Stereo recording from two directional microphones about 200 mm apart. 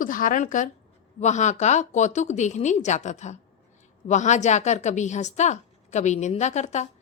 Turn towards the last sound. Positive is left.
turn(degrees=35)  # may be behind; listen again after turning